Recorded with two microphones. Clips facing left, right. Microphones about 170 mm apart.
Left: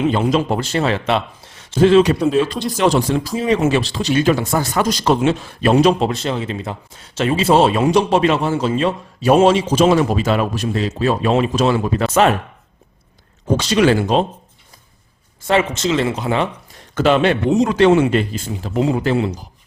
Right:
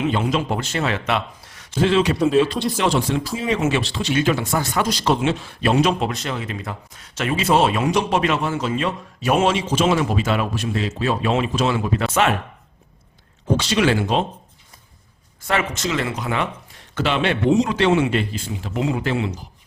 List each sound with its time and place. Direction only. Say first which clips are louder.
0.1 s speech: left 4 dB; 40° left (ahead or behind)
1.8 s a man's voice: left 6 dB; 45° left (ahead or behind)
2.1 s speech: left 1 dB; centre (ahead or behind)
2.7 s speech: left 7 dB; 40° left (ahead or behind)
13.6 s speech: left 5 dB; 40° left (ahead or behind)
15.4 s speech: left 6 dB; 25° left (ahead or behind)
16.9 s a man's voice: left 6 dB; 45° left (ahead or behind)